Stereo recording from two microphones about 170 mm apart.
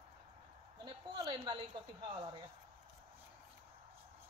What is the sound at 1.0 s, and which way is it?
A woman's voice, 30° right (ahead or behind).